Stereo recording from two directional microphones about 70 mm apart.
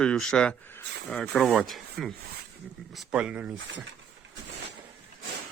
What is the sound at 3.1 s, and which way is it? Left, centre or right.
Speech, centre.